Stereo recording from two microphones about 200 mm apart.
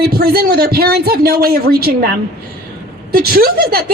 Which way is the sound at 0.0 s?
50° right (ahead or behind).